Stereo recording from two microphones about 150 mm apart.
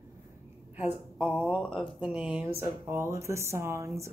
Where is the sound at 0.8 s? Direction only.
10° right (ahead or behind).